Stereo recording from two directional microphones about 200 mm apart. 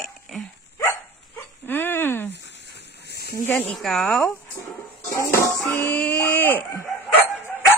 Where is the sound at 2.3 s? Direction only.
60° left (ahead or behind).